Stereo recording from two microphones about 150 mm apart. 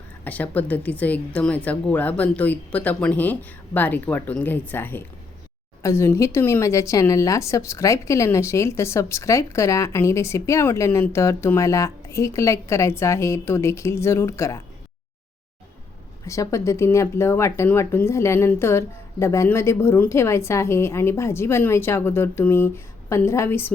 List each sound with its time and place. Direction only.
0.3 s speech: 10° left (ahead or behind)
16.2 s speech: 20° left (ahead or behind)